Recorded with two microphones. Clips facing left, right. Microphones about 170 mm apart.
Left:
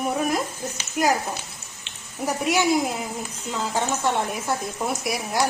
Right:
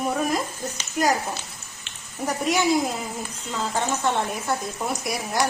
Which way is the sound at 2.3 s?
5° left (ahead or behind).